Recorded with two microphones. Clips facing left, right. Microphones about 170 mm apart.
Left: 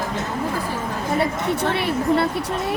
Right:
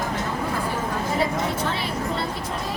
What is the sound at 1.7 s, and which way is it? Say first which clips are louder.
Speech: left 7 dB; 65° left (ahead or behind).